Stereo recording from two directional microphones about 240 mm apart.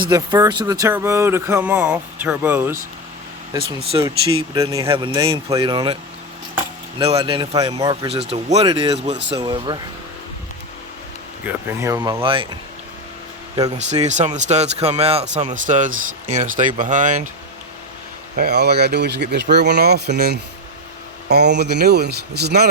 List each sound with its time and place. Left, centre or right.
0.0 s speech: centre
3.9 s speech: centre
7.0 s speech: right
11.4 s speech: centre
13.7 s speech: right
18.3 s speech: right